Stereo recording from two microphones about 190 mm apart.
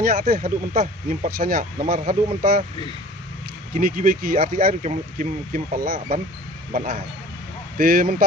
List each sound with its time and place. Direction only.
0.0 s speech: 50° right (ahead or behind)
3.8 s speech: 50° right (ahead or behind)